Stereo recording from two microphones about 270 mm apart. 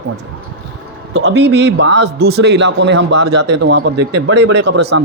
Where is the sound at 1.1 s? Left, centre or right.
Right.